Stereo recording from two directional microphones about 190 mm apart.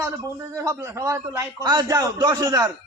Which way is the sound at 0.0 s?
15° right (ahead or behind).